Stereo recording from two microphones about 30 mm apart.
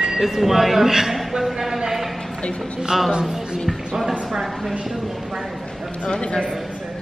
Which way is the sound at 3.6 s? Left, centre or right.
Centre.